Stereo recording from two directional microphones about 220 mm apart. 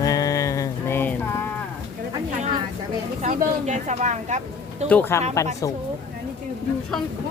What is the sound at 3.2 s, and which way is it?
Speech, 30° right (ahead or behind).